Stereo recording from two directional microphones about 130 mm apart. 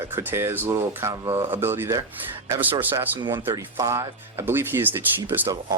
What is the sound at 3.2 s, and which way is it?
Speech, 20° right (ahead or behind).